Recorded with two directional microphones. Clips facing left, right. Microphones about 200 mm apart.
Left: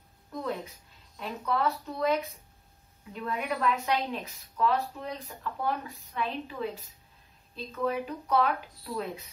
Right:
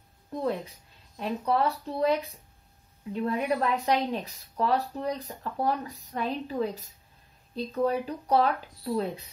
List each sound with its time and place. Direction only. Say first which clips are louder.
0.3 s speech: right 4 dB; 30° right (ahead or behind)